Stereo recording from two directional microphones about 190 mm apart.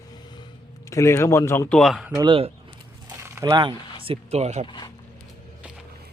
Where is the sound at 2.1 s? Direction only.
25° right (ahead or behind).